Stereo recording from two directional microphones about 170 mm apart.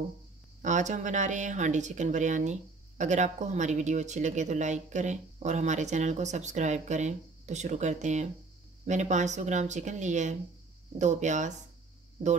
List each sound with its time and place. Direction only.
0.6 s speech: 45° right (ahead or behind)